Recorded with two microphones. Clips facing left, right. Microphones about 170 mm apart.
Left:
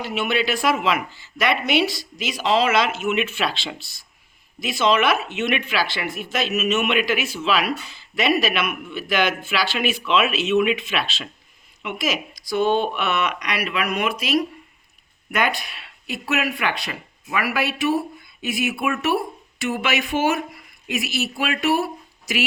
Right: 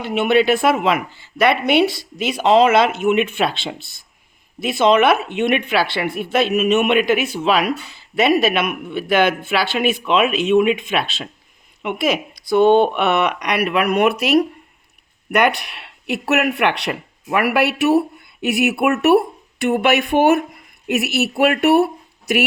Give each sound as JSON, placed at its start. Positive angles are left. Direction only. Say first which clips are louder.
{"t": 0.0, "sound": "speech", "louder": "right 7 dB", "side_deg": -55}